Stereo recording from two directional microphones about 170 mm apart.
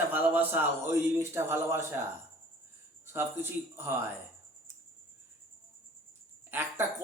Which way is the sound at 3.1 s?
15° right (ahead or behind).